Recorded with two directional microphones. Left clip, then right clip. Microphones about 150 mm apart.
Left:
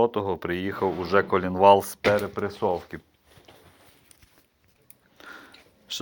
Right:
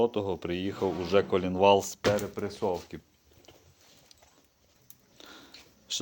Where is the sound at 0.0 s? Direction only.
5° right (ahead or behind).